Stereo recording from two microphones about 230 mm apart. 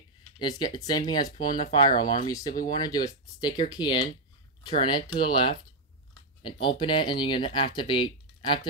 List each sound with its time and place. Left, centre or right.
0.4 s speech: centre